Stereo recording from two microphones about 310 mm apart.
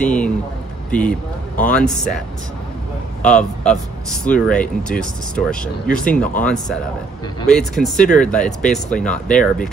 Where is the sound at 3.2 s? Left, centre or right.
Centre.